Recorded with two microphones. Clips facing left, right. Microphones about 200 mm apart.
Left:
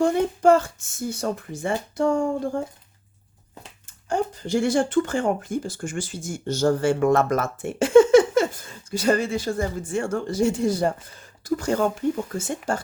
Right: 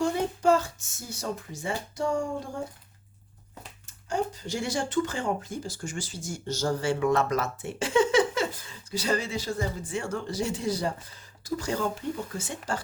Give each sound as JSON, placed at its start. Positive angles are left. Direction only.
{"t": 0.0, "sound": "speech", "side_deg": 55}
{"t": 4.4, "sound": "speech", "side_deg": 55}